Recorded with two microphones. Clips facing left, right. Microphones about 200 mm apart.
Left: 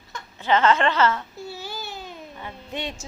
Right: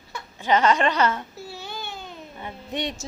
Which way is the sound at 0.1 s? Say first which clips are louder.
Even; 15° right (ahead or behind).